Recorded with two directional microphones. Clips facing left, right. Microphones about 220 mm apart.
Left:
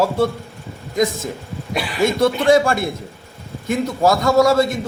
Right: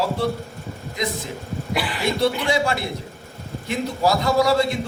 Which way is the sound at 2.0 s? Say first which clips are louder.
Left 7 dB; 45° left (ahead or behind).